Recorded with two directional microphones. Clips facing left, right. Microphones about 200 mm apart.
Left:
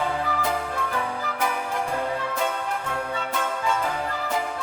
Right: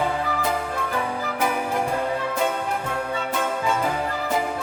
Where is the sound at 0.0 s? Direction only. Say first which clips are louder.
Right 2 dB; 5° right (ahead or behind).